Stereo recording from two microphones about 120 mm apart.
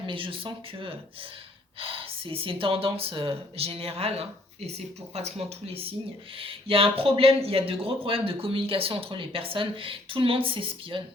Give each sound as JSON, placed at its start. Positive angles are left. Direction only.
{"t": 0.1, "sound": "speech", "side_deg": -45}